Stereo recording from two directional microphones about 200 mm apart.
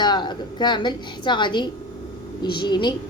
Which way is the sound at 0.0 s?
20° left (ahead or behind).